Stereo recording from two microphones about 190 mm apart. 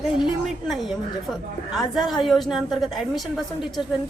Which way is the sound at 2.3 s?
Centre (ahead or behind).